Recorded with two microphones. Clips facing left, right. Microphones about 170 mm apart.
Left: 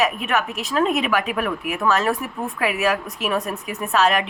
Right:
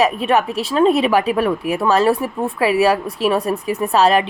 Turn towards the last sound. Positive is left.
turn(degrees=-35)  # may be behind; listen again after turning